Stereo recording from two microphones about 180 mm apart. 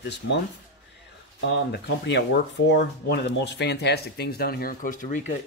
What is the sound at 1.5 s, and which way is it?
A man's voice, 75° left (ahead or behind).